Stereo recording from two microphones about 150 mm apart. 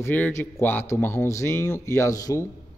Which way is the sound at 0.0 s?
15° left (ahead or behind).